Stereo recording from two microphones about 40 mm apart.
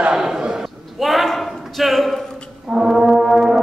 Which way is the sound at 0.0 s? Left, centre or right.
Centre.